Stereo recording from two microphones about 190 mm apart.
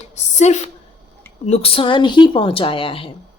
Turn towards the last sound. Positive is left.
turn(degrees=30)  # may be behind; listen again after turning